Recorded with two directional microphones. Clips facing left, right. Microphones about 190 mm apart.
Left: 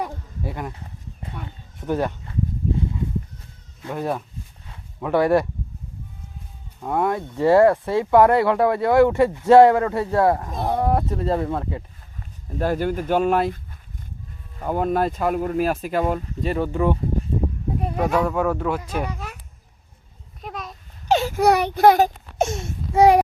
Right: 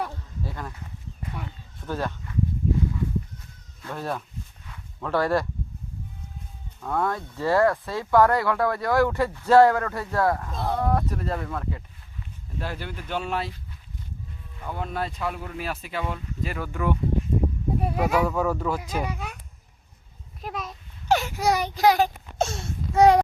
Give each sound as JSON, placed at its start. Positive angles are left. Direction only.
{"t": 0.0, "sound": "a sound", "side_deg": 20}
{"t": 1.8, "sound": "speech", "side_deg": 20}
{"t": 3.8, "sound": "speech", "side_deg": 15}
{"t": 4.6, "sound": "a sound", "side_deg": 30}
{"t": 5.0, "sound": "speech", "side_deg": 20}
{"t": 6.8, "sound": "speech", "side_deg": 20}
{"t": 12.5, "sound": "speech", "side_deg": 45}
{"t": 14.6, "sound": "speech", "side_deg": 45}
{"t": 16.5, "sound": "speech", "side_deg": 25}
{"t": 17.7, "sound": "speech", "side_deg": -5}
{"t": 20.4, "sound": "a sound", "side_deg": 0}
{"t": 21.3, "sound": "a child's voice", "side_deg": 60}
{"t": 22.4, "sound": "a sound", "side_deg": 20}